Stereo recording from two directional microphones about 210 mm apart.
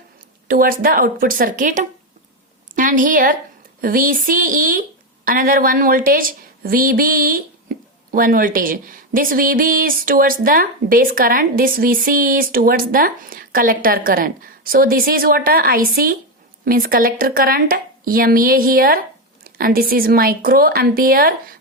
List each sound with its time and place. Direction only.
0.4 s a woman's voice: 45° right (ahead or behind)